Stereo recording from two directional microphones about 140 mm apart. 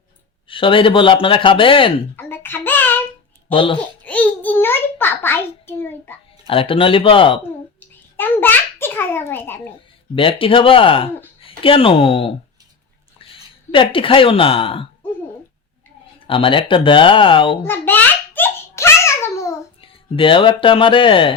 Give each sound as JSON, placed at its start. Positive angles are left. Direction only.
{"t": 0.4, "sound": "speech", "side_deg": 40}
{"t": 2.1, "sound": "child singing", "side_deg": 15}
{"t": 3.5, "sound": "speech", "side_deg": 35}
{"t": 4.0, "sound": "a sound", "side_deg": 10}
{"t": 6.5, "sound": "speech", "side_deg": 40}
{"t": 8.1, "sound": "a sound", "side_deg": 15}
{"t": 10.2, "sound": "speech", "side_deg": 40}
{"t": 13.3, "sound": "speech", "side_deg": 40}
{"t": 16.2, "sound": "speech", "side_deg": 40}
{"t": 17.7, "sound": "a sound", "side_deg": 15}
{"t": 19.8, "sound": "speech", "side_deg": 40}